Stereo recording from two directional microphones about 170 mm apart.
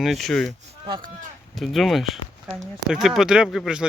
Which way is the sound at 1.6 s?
Centre (ahead or behind).